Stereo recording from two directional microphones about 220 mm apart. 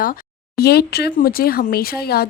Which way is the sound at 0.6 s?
45° left (ahead or behind).